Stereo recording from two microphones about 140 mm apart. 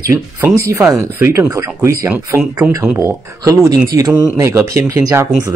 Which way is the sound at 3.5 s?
25° right (ahead or behind).